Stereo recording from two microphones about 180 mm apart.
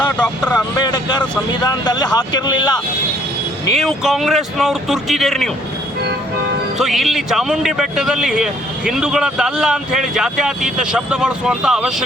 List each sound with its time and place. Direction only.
0.0 s vehicle: 5° left (ahead or behind)
0.8 s vehicle: 25° left (ahead or behind)
1.6 s speech: 25° left (ahead or behind)
3.8 s speech: centre (ahead or behind)
6.7 s speech: centre (ahead or behind)